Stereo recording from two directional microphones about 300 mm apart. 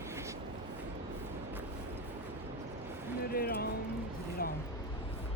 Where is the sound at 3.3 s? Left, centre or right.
Left.